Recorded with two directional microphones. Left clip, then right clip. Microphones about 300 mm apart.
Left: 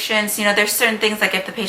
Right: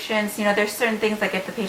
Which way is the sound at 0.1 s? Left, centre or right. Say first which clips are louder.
Left 3 dB; centre.